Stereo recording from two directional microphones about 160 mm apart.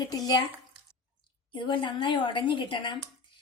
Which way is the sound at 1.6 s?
30° left (ahead or behind).